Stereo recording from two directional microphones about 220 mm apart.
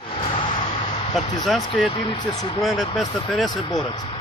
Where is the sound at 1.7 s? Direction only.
20° left (ahead or behind).